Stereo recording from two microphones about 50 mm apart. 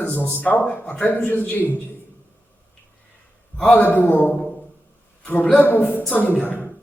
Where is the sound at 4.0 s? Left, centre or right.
Left.